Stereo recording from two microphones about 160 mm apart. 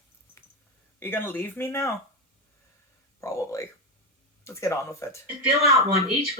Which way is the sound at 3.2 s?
20° left (ahead or behind).